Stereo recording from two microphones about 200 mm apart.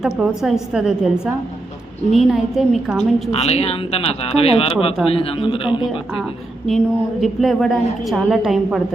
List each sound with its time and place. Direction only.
0.0 s a woman's voice: centre (ahead or behind)
3.3 s speech: 30° left (ahead or behind)
6.7 s a woman's voice: centre (ahead or behind)